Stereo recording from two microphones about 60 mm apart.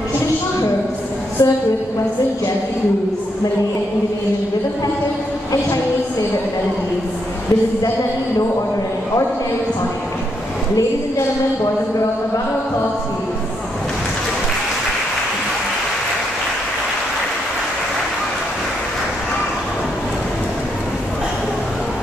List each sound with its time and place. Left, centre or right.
1.4 s a woman's voice: left